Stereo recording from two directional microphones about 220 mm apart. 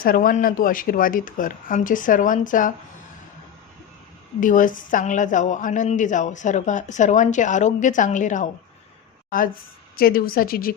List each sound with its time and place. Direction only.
0.0 s a woman's voice: 40° left (ahead or behind)
4.4 s a woman's voice: 35° left (ahead or behind)